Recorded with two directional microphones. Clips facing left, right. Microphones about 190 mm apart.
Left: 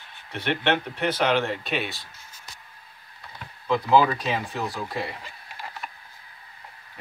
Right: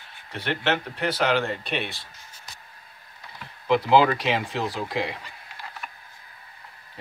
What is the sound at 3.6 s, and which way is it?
Speech, 20° right (ahead or behind).